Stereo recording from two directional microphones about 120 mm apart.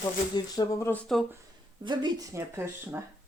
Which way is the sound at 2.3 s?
25° right (ahead or behind).